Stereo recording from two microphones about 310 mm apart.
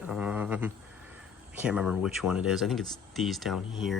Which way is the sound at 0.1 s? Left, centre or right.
Centre.